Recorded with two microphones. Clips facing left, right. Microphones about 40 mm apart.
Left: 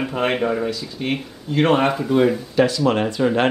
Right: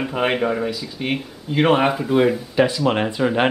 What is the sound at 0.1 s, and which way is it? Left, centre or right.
Speech, centre.